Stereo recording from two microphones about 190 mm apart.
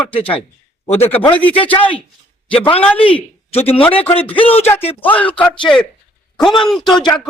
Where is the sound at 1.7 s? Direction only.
25° left (ahead or behind).